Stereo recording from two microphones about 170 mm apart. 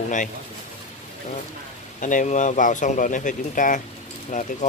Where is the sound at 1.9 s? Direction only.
50° left (ahead or behind).